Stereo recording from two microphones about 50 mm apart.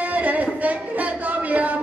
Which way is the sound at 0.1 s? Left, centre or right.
Right.